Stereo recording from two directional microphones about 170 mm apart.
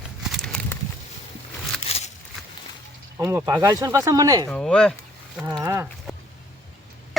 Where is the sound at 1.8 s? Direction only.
40° left (ahead or behind).